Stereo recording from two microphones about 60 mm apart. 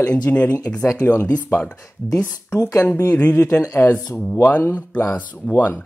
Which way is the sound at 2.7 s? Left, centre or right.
Left.